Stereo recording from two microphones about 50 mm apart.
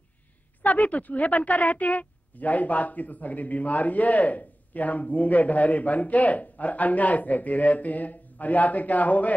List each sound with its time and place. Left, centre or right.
0.6 s a woman's voice: left